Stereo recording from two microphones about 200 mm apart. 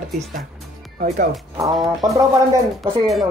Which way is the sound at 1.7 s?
Centre (ahead or behind).